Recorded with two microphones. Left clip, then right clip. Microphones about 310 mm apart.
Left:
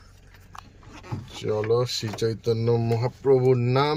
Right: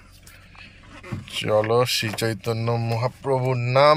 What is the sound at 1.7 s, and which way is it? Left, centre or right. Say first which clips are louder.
Speech: right 4 dB; centre.